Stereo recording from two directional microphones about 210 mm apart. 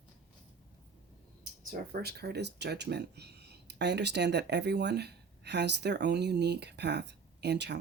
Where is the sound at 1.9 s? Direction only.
50° right (ahead or behind).